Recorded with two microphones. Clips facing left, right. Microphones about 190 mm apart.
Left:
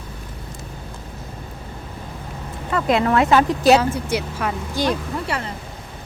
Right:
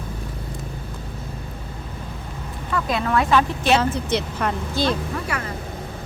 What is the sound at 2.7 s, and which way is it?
Speech, 25° left (ahead or behind).